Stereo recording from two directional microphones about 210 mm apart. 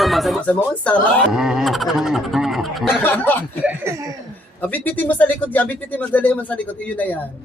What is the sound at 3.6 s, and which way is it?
Speech, 10° right (ahead or behind).